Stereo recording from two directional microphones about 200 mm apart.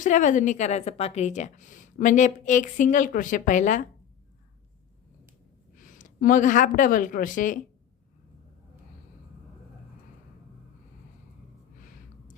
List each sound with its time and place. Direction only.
0.0 s a woman's voice: 40° left (ahead or behind)
5.7 s speech: 40° left (ahead or behind)